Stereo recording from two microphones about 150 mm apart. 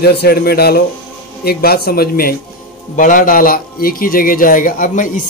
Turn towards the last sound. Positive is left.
turn(degrees=60)  # may be behind; listen again after turning